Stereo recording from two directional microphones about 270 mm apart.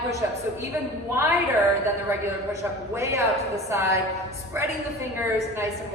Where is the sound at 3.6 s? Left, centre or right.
Centre.